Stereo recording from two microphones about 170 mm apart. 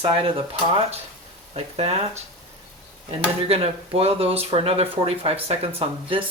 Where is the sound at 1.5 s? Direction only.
40° right (ahead or behind).